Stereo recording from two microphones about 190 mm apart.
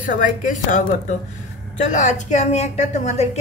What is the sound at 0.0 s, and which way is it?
A woman's voice, 45° left (ahead or behind).